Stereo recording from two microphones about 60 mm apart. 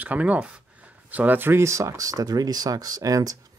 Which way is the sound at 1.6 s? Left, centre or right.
Right.